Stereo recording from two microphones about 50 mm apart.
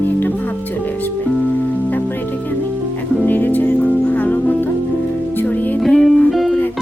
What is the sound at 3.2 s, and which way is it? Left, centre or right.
Music, left.